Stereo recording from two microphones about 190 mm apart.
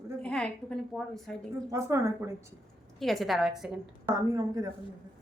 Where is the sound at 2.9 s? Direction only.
Centre (ahead or behind).